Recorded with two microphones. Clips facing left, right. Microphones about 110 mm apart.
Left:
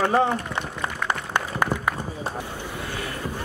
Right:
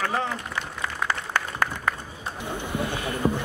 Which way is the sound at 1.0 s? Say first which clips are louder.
Left 1 dB; 15° left (ahead or behind).